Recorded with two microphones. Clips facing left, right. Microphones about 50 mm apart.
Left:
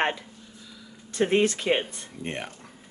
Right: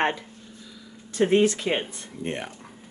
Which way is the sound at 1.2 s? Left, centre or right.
Left.